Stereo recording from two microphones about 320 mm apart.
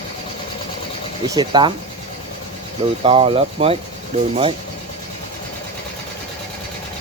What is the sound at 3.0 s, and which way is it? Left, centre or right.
Speech, centre.